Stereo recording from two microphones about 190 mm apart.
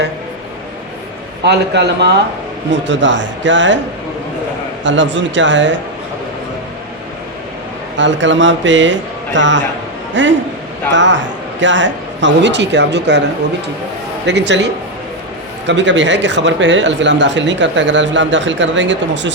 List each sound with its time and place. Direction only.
1.5 s a man's voice: 60° right (ahead or behind)
4.8 s speech: 75° right (ahead or behind)
7.9 s speech: 75° right (ahead or behind)
14.3 s a man's voice: 65° right (ahead or behind)